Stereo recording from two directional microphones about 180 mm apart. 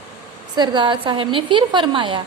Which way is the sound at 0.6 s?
25° right (ahead or behind).